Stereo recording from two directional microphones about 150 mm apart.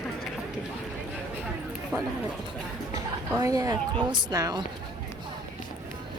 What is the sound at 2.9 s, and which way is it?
Music, 25° right (ahead or behind).